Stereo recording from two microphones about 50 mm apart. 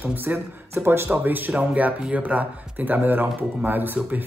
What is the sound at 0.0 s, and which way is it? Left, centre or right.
Speech, right.